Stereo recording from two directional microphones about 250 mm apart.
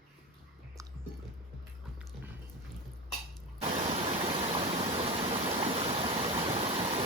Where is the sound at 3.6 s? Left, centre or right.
Right.